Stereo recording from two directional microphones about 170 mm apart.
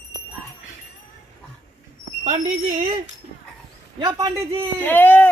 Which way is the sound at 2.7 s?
35° right (ahead or behind).